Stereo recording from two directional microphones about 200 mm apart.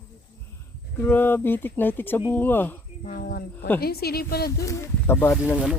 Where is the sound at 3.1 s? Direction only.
45° left (ahead or behind).